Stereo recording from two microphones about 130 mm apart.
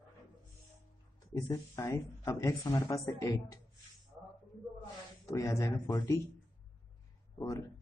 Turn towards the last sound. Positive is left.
turn(degrees=25)  # may be behind; listen again after turning